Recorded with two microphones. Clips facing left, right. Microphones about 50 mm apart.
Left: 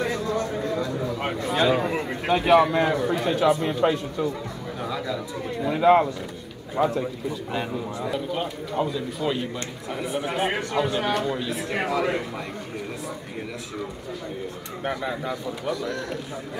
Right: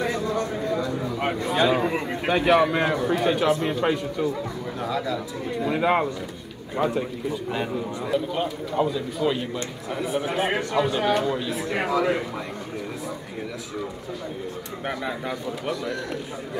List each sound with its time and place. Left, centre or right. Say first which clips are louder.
0.0 s a sound: even; centre
2.8 s a man's voice: left 1 dB; centre
3.8 s a man's voice: left 1 dB; right
4.8 s a man's voice: right 2 dB; centre
5.7 s speech: left 4 dB; centre
8.1 s a man's voice: right 5 dB; centre
14.9 s speech: left 1 dB; centre